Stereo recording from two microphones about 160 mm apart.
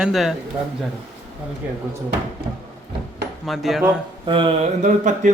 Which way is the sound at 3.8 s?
30° right (ahead or behind).